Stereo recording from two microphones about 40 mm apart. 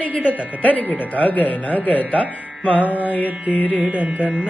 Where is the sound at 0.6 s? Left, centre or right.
Left.